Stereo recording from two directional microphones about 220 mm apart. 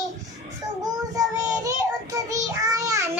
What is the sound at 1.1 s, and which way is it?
Child singing, 15° right (ahead or behind).